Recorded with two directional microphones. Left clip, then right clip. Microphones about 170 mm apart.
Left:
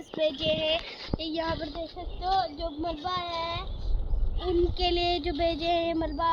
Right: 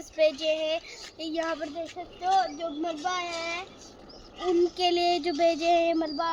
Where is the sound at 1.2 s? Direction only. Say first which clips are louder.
Right 1 dB; 45° right (ahead or behind).